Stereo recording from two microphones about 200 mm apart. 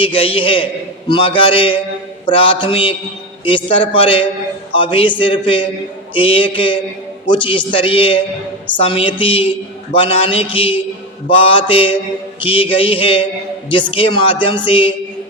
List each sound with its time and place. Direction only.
0.0 s a man's voice: 25° left (ahead or behind)